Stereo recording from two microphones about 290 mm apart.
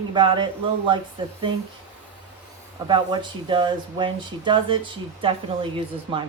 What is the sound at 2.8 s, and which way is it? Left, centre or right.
A woman's voice, centre.